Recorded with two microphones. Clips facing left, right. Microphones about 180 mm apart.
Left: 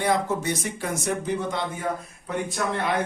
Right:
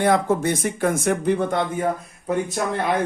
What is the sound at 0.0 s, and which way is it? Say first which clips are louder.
A man's voice: right 5 dB; 55° right (ahead or behind).